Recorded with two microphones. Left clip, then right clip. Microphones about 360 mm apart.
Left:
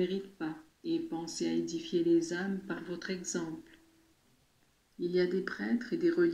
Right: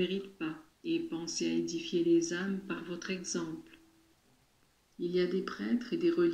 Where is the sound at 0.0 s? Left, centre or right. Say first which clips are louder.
Even; centre.